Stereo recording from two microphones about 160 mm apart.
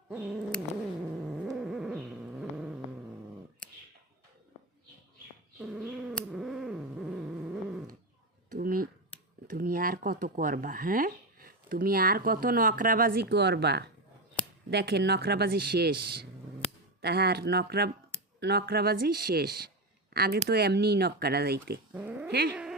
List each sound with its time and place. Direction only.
0.1 s purr: 5° right (ahead or behind)
1.1 s a sound: centre (ahead or behind)
5.5 s bird: 5° right (ahead or behind)
6.1 s purr: centre (ahead or behind)
8.5 s a sound: 65° right (ahead or behind)
9.6 s speech: 65° right (ahead or behind)
21.9 s cat: 10° right (ahead or behind)
22.3 s cat: 70° right (ahead or behind)